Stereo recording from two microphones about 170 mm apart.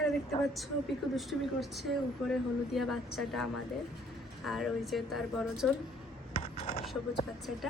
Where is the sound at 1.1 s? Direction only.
Centre (ahead or behind).